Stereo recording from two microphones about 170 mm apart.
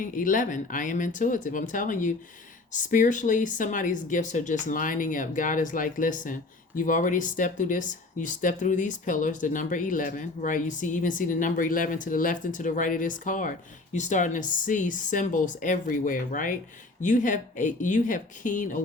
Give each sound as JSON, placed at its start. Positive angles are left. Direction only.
{"t": 0.0, "sound": "speech", "side_deg": 50}